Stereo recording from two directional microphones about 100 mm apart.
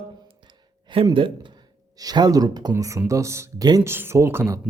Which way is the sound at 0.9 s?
60° right (ahead or behind).